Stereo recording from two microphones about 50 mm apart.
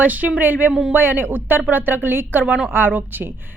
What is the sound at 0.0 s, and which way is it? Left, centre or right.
Speech, right.